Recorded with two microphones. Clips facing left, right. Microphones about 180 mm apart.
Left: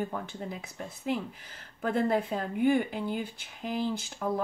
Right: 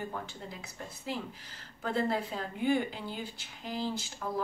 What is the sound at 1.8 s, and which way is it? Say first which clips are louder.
Speech: left 4 dB; 55° left (ahead or behind).